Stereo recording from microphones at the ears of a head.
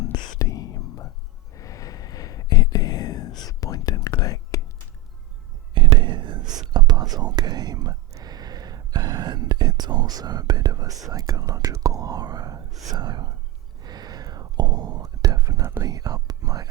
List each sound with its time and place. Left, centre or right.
0.0 s whispering: left
5.7 s whispering: right